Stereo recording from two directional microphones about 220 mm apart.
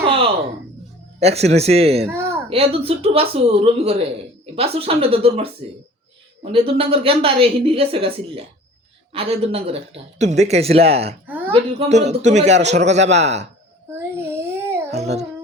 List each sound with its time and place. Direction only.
1.2 s a woman's voice: 30° right (ahead or behind)
2.0 s speech: 10° right (ahead or behind)
2.5 s a woman's voice: 25° right (ahead or behind)
11.3 s a sound: 10° right (ahead or behind)
11.5 s a man's voice: 30° right (ahead or behind)
14.5 s a sound: 10° right (ahead or behind)
15.0 s music: 30° right (ahead or behind)